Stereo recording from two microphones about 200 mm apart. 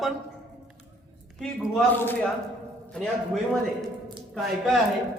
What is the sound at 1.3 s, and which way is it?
Speech, centre (ahead or behind).